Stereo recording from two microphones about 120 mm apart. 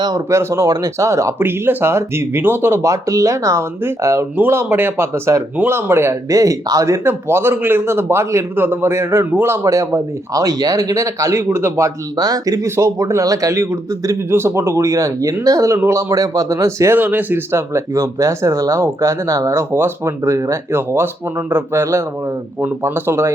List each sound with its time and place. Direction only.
0.0 s speech: 30° right (ahead or behind)
12.1 s speech: 30° right (ahead or behind)